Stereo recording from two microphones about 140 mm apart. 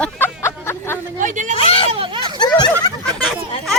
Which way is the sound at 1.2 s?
65° right (ahead or behind).